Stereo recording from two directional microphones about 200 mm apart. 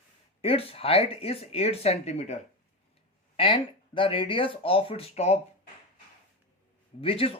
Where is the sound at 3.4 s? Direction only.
25° left (ahead or behind).